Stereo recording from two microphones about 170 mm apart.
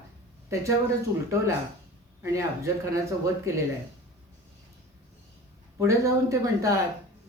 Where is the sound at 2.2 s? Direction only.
15° right (ahead or behind).